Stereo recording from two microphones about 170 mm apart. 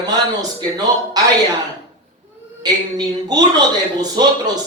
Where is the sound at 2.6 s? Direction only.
25° right (ahead or behind).